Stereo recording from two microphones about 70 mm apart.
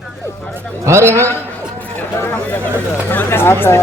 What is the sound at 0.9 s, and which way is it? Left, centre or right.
Speech, right.